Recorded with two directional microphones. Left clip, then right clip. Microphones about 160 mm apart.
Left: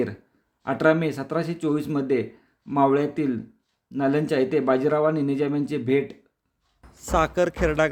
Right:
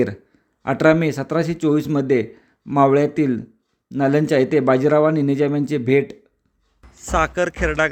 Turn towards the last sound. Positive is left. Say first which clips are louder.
# right 2 dB
turn(degrees=0)  # may be behind; listen again after turning